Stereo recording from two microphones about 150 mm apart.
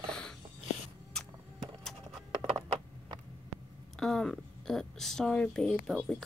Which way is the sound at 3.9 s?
5° left (ahead or behind).